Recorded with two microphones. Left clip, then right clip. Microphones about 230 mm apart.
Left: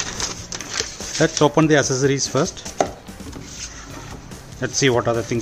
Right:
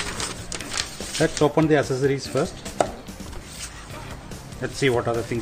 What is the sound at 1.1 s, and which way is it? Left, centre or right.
Speech, left.